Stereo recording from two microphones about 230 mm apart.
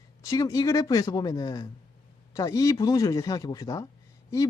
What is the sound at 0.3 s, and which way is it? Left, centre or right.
Speech, centre.